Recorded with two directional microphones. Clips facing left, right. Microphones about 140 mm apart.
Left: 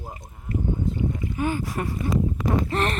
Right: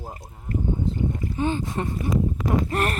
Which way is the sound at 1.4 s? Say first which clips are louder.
Right 1 dB; 25° right (ahead or behind).